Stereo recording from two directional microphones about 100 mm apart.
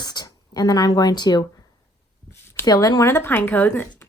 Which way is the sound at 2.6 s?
40° left (ahead or behind).